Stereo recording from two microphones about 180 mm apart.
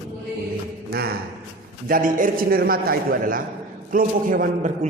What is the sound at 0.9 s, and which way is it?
A man's voice, 60° right (ahead or behind).